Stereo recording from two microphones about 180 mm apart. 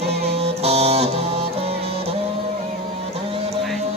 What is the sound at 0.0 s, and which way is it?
Music, 65° right (ahead or behind).